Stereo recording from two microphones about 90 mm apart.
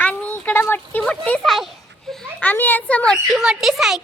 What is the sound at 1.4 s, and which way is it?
Speech, centre (ahead or behind).